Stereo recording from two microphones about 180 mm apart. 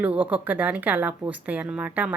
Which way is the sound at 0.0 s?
10° right (ahead or behind).